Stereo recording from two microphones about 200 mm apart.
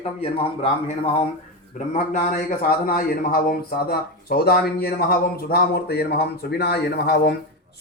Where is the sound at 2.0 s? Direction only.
40° left (ahead or behind).